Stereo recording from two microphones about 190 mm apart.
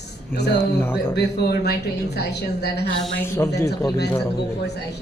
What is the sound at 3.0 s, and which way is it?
Speech, 10° left (ahead or behind).